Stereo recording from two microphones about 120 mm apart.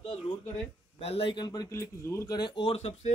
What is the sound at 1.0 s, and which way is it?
Speech, 55° left (ahead or behind).